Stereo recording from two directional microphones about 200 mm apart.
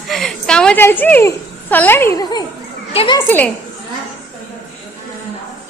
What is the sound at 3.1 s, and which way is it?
Speech, 10° left (ahead or behind).